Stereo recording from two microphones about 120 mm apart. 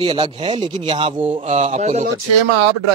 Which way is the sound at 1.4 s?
70° right (ahead or behind).